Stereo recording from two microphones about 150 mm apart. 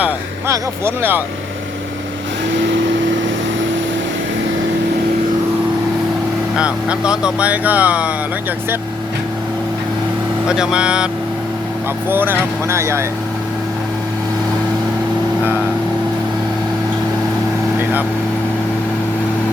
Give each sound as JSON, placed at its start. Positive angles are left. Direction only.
{"t": 0.0, "sound": "speech", "side_deg": -15}
{"t": 6.6, "sound": "speech", "side_deg": -5}
{"t": 10.5, "sound": "speech", "side_deg": -5}